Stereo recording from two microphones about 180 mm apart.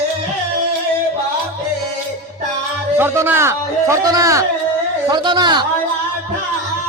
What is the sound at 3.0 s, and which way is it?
A man's voice, 10° right (ahead or behind).